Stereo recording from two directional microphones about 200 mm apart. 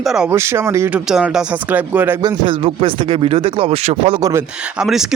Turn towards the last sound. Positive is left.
turn(degrees=-5)  # may be behind; listen again after turning